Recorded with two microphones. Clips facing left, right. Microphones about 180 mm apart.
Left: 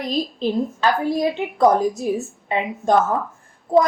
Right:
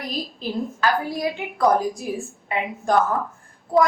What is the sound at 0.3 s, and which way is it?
A woman's voice, 25° left (ahead or behind).